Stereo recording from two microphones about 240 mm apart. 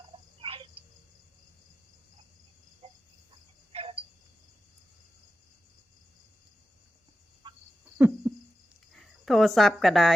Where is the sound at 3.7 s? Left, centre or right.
Right.